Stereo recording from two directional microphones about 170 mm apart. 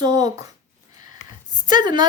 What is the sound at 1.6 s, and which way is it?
Speech, 25° right (ahead or behind).